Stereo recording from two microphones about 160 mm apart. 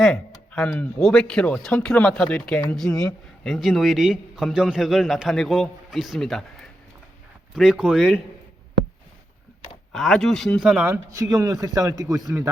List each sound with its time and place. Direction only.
0.0 s a man's voice: 5° left (ahead or behind)
9.9 s a man's voice: centre (ahead or behind)
10.8 s a man's voice: 15° right (ahead or behind)